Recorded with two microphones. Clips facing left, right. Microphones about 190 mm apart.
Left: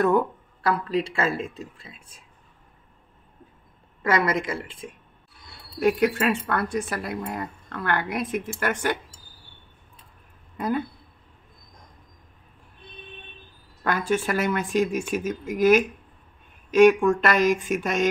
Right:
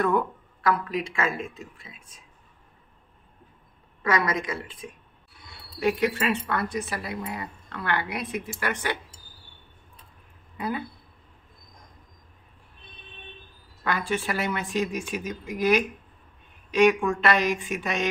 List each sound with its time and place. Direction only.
0.0 s speech: 40° left (ahead or behind)
4.0 s a woman's voice: 25° left (ahead or behind)
5.8 s speech: 45° left (ahead or behind)
13.8 s speech: 45° left (ahead or behind)